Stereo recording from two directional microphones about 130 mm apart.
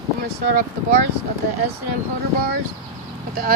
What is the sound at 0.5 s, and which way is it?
Speech, 70° right (ahead or behind).